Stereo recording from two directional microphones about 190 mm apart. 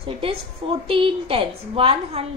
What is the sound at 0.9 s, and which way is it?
A woman's voice, 30° right (ahead or behind).